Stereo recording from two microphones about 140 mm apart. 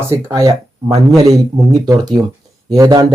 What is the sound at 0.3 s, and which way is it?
Speech, 25° right (ahead or behind).